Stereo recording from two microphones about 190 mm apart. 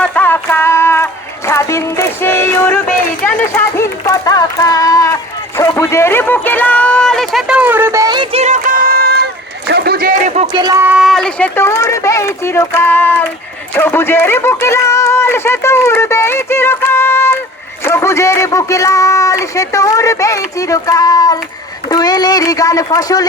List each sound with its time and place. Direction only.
0.0 s a sound: 10° left (ahead or behind)
3.2 s speech: 15° left (ahead or behind); by 10.6 s 35° right (ahead or behind)
10.6 s a man's voice: 15° right (ahead or behind); by 23.2 s 20° left (ahead or behind)